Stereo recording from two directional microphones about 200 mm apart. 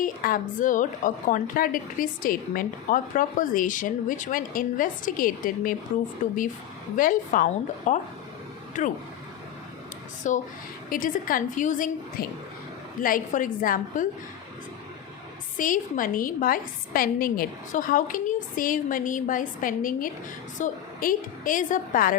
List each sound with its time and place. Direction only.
0.0 s a woman's voice: 45° left (ahead or behind)
10.3 s a woman's voice: 40° left (ahead or behind)
15.5 s a woman's voice: 40° left (ahead or behind)